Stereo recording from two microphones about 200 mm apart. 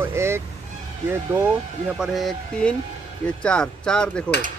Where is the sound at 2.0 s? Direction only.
Centre (ahead or behind).